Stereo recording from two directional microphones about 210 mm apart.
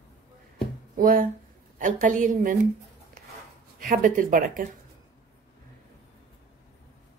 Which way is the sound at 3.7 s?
40° right (ahead or behind).